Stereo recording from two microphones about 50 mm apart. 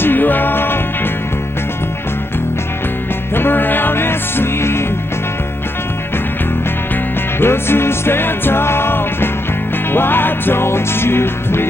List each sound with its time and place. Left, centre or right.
0.0 s music: left
3.3 s music: left
7.3 s music: left